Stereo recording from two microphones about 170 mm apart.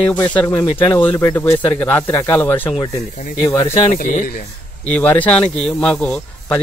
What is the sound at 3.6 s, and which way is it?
Speech, 40° left (ahead or behind).